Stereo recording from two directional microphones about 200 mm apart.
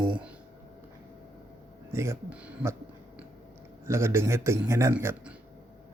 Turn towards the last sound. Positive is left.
turn(degrees=-10)  # may be behind; listen again after turning